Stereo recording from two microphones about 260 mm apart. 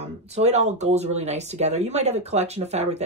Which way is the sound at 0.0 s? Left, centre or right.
Right.